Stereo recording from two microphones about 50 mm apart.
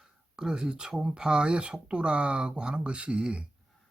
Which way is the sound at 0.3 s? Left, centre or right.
Centre.